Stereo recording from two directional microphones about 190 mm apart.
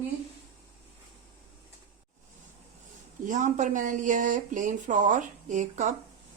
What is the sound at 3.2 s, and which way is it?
Speech, 40° right (ahead or behind).